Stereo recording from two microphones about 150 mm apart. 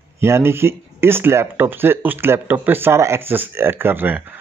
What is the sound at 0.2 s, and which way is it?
A man's voice, 15° right (ahead or behind).